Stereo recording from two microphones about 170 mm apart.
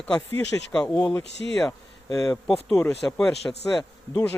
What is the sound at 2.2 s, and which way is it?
Speech, centre (ahead or behind).